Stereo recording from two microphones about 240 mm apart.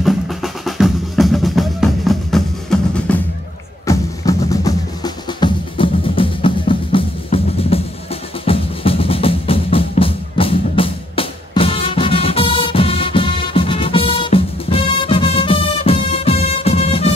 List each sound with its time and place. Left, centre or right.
0.0 s music: centre
3.8 s music: centre